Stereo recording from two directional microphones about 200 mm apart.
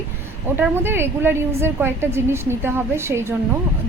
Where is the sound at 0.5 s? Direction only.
10° right (ahead or behind).